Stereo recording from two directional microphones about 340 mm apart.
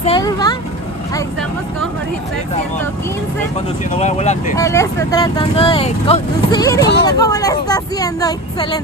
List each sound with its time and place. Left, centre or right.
0.0 s vehicle: centre
3.9 s speech: centre
4.6 s speech: centre